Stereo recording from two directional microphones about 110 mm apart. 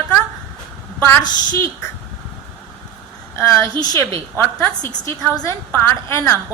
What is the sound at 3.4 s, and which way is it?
Speech, 25° left (ahead or behind).